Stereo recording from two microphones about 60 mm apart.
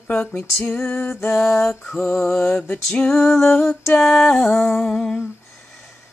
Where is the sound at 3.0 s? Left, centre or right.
Centre.